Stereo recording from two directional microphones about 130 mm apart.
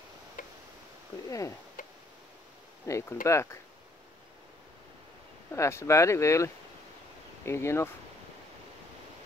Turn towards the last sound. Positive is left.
turn(degrees=20)  # may be behind; listen again after turning